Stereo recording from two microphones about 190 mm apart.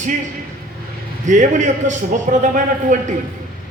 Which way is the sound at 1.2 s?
40° right (ahead or behind).